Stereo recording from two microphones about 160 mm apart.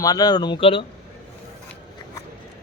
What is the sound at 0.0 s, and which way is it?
Speech, 25° left (ahead or behind).